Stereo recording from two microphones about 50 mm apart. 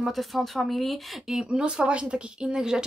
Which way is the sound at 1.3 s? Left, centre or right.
Centre.